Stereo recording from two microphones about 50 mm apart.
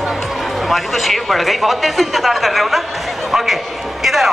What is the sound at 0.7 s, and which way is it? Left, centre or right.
A woman's voice, centre.